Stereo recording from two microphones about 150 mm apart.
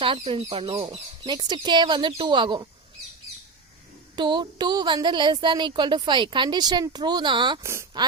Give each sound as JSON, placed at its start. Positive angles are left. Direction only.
{"t": 0.0, "sound": "speech", "side_deg": -35}
{"t": 4.1, "sound": "speech", "side_deg": -30}
{"t": 7.6, "sound": "speech", "side_deg": -15}